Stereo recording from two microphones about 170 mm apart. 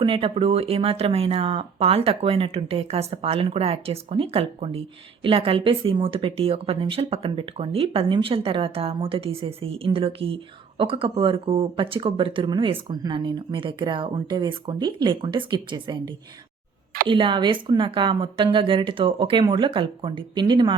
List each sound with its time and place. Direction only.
0.0 s a woman's voice: 30° right (ahead or behind)